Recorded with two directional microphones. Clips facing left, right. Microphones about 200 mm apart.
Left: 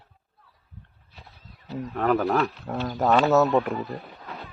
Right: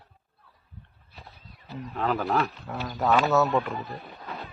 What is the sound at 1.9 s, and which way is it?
Speech, 50° left (ahead or behind).